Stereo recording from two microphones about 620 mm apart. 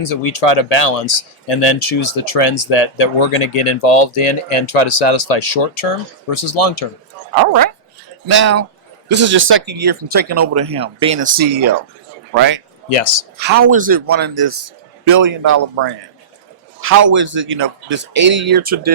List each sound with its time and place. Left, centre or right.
0.0 s speech: left
6.3 s speech: left
8.3 s speech: centre
12.9 s speech: left
13.4 s a man's voice: centre
16.8 s speech: centre